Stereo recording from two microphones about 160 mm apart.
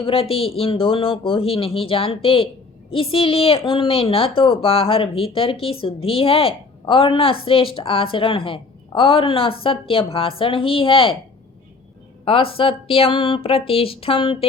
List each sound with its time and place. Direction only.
0.0 s a woman's voice: 35° left (ahead or behind)
12.2 s a woman's voice: 35° left (ahead or behind)